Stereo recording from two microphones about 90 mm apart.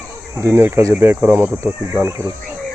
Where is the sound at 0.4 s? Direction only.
30° right (ahead or behind).